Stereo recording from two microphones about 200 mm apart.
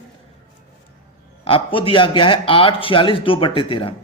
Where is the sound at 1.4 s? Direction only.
25° left (ahead or behind).